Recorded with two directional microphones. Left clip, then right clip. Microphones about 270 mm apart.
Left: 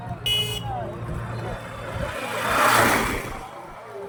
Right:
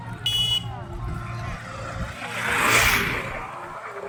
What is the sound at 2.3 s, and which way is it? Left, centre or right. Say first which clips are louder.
Vehicle: left 2 dB; left.